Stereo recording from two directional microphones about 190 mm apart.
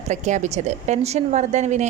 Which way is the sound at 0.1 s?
40° right (ahead or behind).